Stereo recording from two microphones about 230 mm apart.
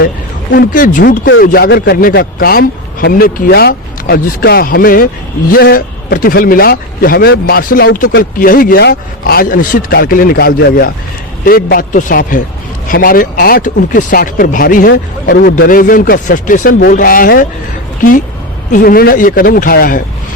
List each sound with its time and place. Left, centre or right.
0.5 s speech: left
18.7 s speech: left